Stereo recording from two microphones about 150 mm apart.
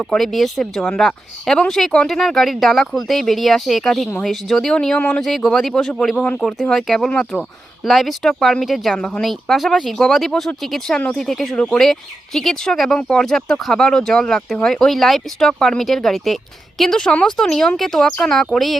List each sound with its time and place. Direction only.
0.1 s speech: centre (ahead or behind)